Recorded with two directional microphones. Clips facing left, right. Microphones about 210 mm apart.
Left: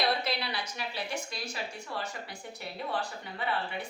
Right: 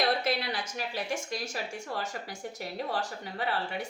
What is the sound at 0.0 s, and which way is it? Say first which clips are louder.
A woman's voice: right 2 dB; 50° right (ahead or behind).